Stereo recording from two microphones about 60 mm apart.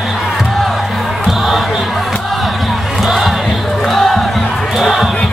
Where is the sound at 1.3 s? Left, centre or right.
Centre.